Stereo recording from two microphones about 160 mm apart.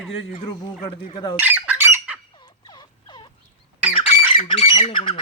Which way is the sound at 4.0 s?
30° left (ahead or behind).